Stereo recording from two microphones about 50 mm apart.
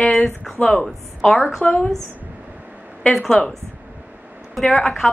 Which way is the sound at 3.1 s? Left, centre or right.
Centre.